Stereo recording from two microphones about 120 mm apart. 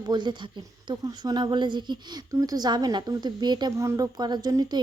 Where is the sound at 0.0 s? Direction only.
40° right (ahead or behind).